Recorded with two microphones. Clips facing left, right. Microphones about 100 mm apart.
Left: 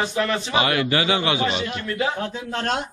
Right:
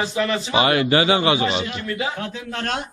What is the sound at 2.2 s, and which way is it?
Speech, 30° left (ahead or behind).